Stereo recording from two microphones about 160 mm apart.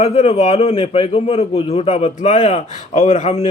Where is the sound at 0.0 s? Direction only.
45° left (ahead or behind).